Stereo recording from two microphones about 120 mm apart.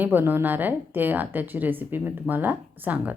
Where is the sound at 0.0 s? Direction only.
15° right (ahead or behind).